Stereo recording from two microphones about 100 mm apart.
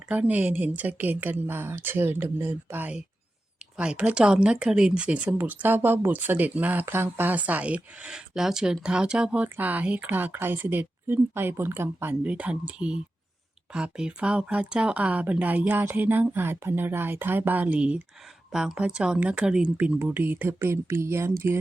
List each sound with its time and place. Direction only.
0.1 s a woman's voice: 15° right (ahead or behind)